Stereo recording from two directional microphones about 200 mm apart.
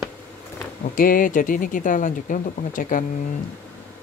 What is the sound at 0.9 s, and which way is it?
Speech, 45° left (ahead or behind).